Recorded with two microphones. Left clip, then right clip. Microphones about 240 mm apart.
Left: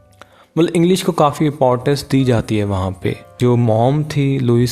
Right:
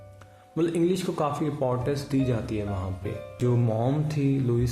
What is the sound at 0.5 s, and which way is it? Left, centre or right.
Speech, left.